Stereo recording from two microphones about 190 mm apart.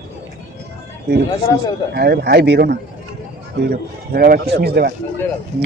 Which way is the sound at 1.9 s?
55° right (ahead or behind).